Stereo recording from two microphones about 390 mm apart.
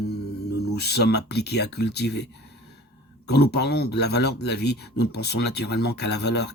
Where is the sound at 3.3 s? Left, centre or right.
Left.